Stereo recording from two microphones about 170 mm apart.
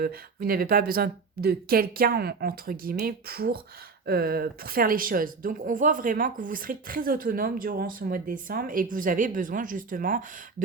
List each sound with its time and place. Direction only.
0.0 s speech: 60° right (ahead or behind)